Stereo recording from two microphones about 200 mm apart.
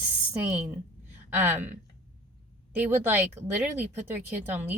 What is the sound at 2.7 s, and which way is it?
Speech, 10° right (ahead or behind).